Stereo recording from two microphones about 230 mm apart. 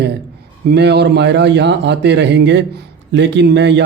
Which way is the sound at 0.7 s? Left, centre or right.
Right.